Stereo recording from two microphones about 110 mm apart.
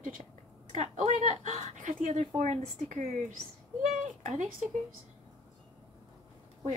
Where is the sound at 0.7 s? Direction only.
90° right.